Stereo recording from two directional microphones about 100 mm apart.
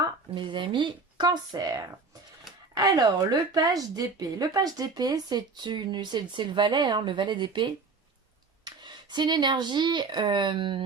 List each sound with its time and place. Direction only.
0.3 s speech: 55° right (ahead or behind)